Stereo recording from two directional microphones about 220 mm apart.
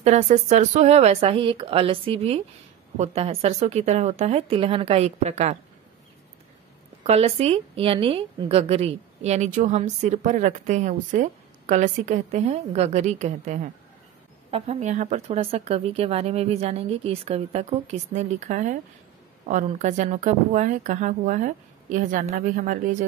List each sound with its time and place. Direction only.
0.0 s speech: 30° right (ahead or behind)
7.0 s a woman's voice: 30° right (ahead or behind)